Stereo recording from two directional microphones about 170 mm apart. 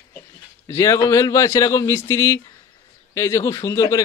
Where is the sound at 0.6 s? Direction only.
20° left (ahead or behind).